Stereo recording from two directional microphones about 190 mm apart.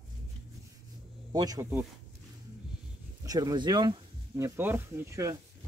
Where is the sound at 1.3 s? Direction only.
20° right (ahead or behind).